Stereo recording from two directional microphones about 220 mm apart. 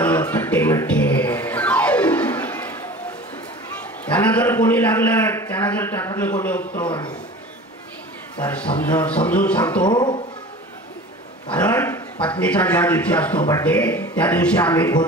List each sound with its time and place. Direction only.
0.0 s music: 5° left (ahead or behind)
4.0 s a man's voice: 5° left (ahead or behind)
8.5 s a man's voice: 5° left (ahead or behind)
9.8 s speech: 20° left (ahead or behind)
11.5 s a man's voice: 10° left (ahead or behind)